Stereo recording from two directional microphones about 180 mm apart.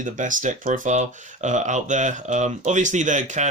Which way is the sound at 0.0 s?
45° right (ahead or behind).